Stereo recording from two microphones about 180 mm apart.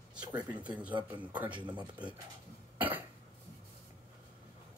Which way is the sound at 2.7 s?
10° right (ahead or behind).